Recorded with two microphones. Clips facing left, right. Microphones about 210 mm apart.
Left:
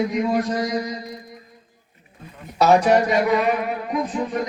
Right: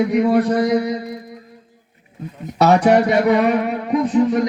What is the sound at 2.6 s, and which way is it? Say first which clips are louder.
Speech: right 3 dB; 65° right (ahead or behind).